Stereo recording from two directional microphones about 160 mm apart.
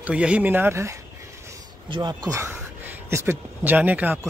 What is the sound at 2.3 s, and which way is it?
Speech, 15° right (ahead or behind).